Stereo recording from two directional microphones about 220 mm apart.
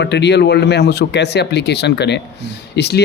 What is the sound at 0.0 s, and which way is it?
Speech, 50° left (ahead or behind).